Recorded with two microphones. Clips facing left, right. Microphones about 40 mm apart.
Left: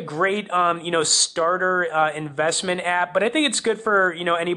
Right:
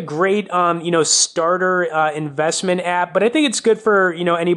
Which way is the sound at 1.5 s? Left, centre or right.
Right.